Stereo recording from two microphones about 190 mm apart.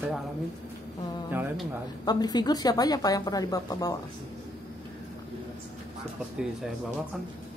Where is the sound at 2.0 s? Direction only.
20° left (ahead or behind).